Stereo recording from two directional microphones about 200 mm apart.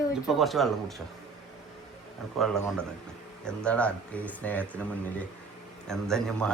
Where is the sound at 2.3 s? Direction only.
Centre (ahead or behind).